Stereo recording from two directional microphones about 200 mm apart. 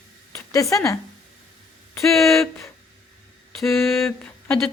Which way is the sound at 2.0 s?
Centre (ahead or behind).